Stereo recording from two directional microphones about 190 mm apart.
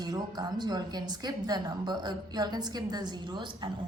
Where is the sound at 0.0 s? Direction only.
20° right (ahead or behind).